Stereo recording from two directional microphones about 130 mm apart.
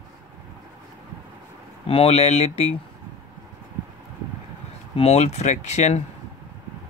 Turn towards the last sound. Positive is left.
turn(degrees=60)  # may be behind; listen again after turning